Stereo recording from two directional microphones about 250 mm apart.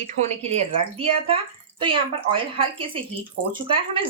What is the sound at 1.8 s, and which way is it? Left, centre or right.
Speech, right.